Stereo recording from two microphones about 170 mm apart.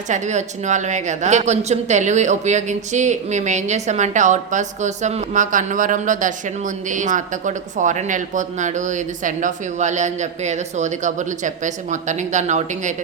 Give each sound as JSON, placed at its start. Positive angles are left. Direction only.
{"t": 0.1, "sound": "speech", "side_deg": -45}